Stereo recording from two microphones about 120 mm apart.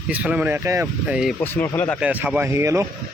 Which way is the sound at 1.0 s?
5° right (ahead or behind).